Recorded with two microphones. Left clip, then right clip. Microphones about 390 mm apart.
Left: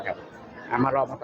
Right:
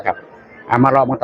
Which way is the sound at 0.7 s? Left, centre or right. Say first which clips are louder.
Right 11 dB; centre.